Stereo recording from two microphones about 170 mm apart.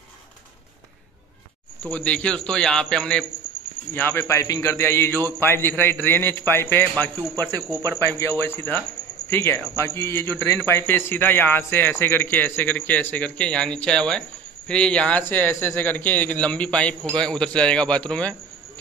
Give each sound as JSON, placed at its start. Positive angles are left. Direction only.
{"t": 1.8, "sound": "a man's voice", "side_deg": 10}
{"t": 7.3, "sound": "speech", "side_deg": -20}
{"t": 8.0, "sound": "a man's voice", "side_deg": 15}